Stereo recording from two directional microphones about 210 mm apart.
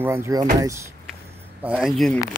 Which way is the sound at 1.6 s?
5° right (ahead or behind).